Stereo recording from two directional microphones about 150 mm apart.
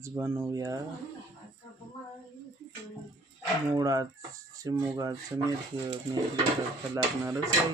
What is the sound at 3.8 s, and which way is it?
Speech, 25° right (ahead or behind).